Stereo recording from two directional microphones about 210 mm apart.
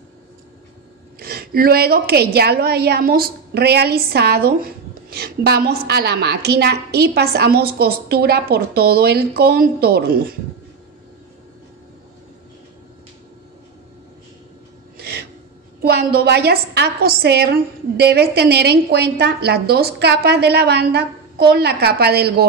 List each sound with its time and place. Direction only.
1.2 s a woman's voice: 45° right (ahead or behind)
15.0 s a sound: 50° right (ahead or behind)
15.8 s a woman's voice: 50° right (ahead or behind)